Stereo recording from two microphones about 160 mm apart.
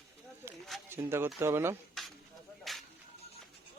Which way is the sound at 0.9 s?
15° right (ahead or behind).